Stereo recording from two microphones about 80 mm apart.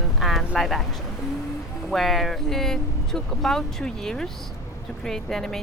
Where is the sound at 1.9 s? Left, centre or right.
Centre.